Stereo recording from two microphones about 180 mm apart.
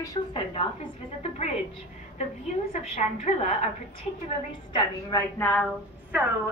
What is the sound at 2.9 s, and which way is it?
Speech, 35° left (ahead or behind).